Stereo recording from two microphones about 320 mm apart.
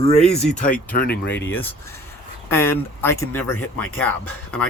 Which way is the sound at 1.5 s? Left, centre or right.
Centre.